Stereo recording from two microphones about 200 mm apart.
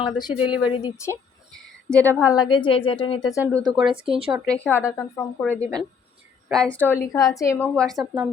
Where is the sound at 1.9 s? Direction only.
5° left (ahead or behind).